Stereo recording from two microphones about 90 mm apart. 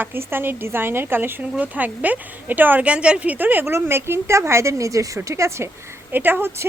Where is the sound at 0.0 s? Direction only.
25° right (ahead or behind).